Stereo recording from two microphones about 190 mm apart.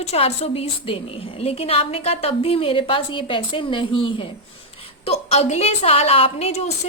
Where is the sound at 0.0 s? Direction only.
35° left (ahead or behind).